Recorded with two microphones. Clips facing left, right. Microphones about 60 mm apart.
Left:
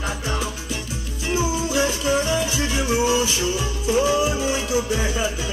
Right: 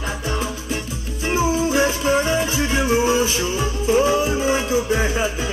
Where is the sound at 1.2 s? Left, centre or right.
Right.